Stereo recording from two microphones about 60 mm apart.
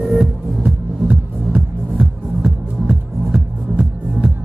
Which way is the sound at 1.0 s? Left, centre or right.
Centre.